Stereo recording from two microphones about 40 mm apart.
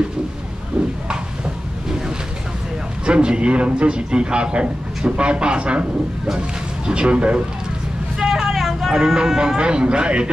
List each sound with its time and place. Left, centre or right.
0.7 s a sound: centre
3.1 s a man's voice: right
6.9 s a man's voice: right
8.2 s vehicle: centre
8.9 s a man's voice: centre